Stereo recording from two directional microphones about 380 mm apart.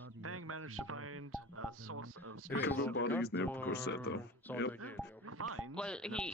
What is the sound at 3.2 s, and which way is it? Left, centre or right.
Speech, left.